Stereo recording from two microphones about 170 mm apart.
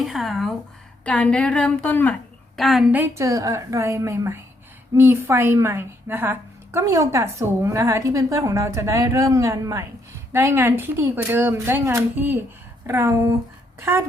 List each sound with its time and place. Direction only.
0.0 s a woman's voice: centre (ahead or behind)
2.6 s speech: centre (ahead or behind)
3.0 s a woman's voice: 15° right (ahead or behind)